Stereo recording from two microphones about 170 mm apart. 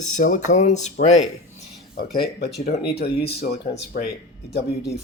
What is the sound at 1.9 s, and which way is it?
Speech, 65° left (ahead or behind).